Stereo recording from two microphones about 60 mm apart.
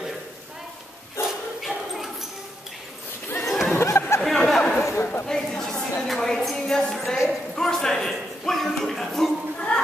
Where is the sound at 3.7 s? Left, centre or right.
Left.